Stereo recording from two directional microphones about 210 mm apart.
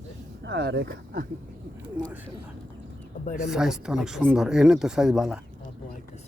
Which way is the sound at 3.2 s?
35° left (ahead or behind).